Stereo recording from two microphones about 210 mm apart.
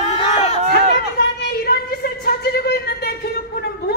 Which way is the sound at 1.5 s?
50° left (ahead or behind).